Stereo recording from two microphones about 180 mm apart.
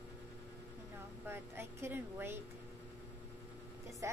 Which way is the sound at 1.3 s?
15° right (ahead or behind).